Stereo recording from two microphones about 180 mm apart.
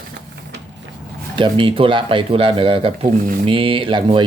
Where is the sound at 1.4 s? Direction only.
30° right (ahead or behind).